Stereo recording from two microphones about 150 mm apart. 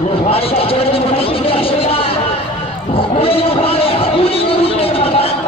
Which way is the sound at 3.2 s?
40° left (ahead or behind).